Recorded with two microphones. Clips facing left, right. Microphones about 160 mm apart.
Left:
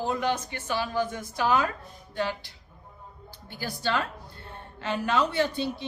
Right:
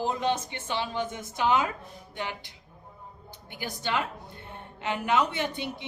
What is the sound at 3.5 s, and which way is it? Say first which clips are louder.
A woman's voice: left 2 dB; 20° right (ahead or behind).